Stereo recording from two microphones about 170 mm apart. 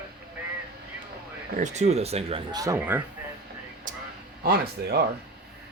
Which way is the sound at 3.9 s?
50° right (ahead or behind).